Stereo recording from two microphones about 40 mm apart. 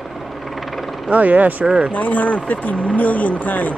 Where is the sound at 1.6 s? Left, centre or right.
Right.